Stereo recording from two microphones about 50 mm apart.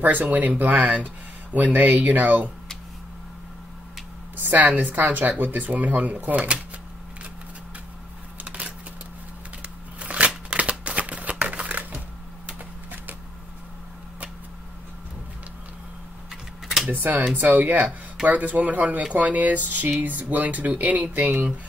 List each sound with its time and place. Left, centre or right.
0.0 s speech: right
4.4 s speech: right
8.5 s a sound: right
9.6 s shuffling cards: right
16.9 s speech: right